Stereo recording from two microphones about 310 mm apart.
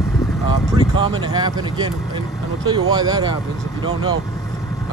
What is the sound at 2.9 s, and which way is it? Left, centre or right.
Speech, centre.